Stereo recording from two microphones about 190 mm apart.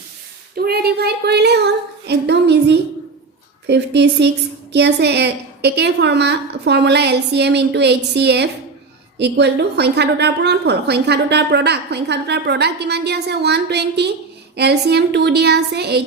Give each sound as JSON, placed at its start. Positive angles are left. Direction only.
{"t": 0.5, "sound": "child singing", "side_deg": -55}
{"t": 3.7, "sound": "a woman's voice", "side_deg": -65}